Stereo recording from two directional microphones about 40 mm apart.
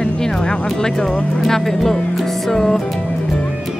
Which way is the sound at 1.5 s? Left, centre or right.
Centre.